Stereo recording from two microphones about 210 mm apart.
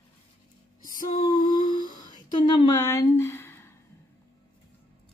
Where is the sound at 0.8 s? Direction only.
40° left (ahead or behind).